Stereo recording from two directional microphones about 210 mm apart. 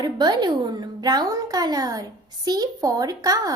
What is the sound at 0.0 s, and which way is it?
Speech, 20° right (ahead or behind).